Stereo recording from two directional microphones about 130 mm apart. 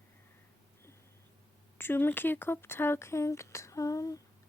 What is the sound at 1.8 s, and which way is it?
Speech, 15° left (ahead or behind).